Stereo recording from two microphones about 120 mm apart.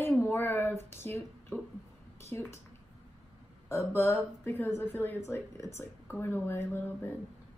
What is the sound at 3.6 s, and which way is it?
A woman's voice, 25° left (ahead or behind).